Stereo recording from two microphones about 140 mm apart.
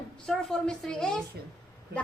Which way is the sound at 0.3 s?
5° left (ahead or behind).